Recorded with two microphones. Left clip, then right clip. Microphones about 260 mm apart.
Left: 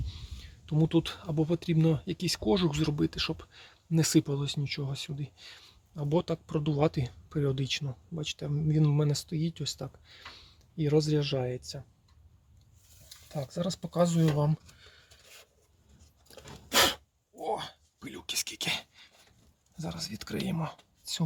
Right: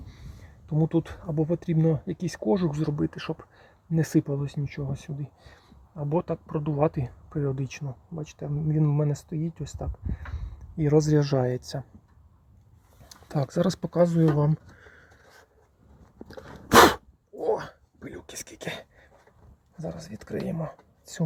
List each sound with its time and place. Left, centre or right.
0.6 s speech: centre
11.0 s speech: centre
13.1 s a sound: right
13.8 s speech: centre
16.6 s sneeze: right
17.4 s dog: centre
18.0 s speech: centre